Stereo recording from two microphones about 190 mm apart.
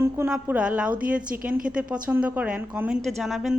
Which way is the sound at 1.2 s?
45° right (ahead or behind).